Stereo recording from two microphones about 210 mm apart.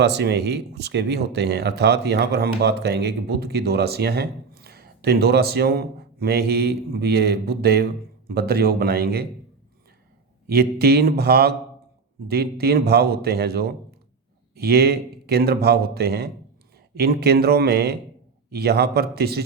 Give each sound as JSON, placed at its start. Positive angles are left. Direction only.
{"t": 0.0, "sound": "speech", "side_deg": -50}
{"t": 10.4, "sound": "speech", "side_deg": -50}